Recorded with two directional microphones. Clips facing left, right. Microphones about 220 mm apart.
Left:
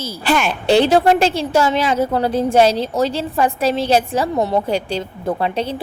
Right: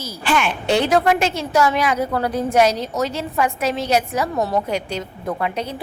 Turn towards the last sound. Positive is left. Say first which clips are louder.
# left 4 dB
turn(degrees=30)  # may be behind; listen again after turning